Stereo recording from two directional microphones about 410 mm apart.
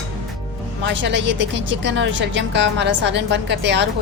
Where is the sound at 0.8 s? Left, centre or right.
Right.